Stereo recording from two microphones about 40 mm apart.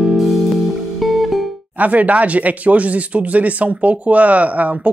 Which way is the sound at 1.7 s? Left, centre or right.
Right.